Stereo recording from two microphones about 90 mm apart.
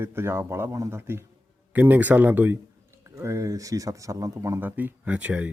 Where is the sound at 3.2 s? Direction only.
35° right (ahead or behind).